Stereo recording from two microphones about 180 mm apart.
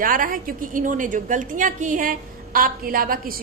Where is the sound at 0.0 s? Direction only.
50° right (ahead or behind).